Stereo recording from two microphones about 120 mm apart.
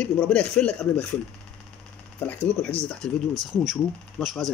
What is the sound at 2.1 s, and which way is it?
Speech, 15° left (ahead or behind).